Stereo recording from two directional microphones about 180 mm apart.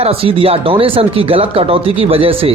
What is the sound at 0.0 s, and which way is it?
Speech, 30° right (ahead or behind).